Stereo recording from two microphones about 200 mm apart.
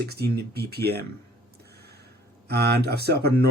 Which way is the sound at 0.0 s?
50° right (ahead or behind).